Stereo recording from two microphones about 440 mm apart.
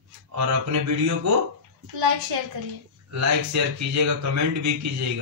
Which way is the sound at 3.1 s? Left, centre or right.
Right.